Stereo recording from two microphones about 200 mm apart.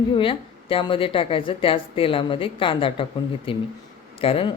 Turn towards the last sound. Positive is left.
turn(degrees=30)  # may be behind; listen again after turning